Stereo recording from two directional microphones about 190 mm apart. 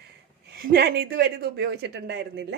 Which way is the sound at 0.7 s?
55° right (ahead or behind).